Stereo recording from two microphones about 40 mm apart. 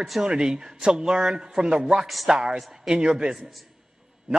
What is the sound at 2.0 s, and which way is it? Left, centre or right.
Speech, centre.